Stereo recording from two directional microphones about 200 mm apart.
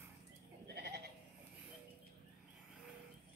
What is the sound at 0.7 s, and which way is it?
Sheep, 55° right (ahead or behind).